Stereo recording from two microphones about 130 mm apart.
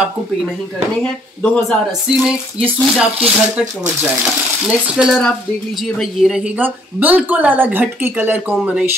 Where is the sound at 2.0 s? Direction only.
5° right (ahead or behind).